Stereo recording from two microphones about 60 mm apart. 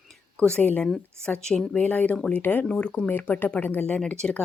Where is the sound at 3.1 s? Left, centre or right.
Left.